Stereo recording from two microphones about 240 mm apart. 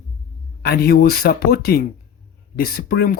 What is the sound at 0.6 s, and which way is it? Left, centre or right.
Speech, left.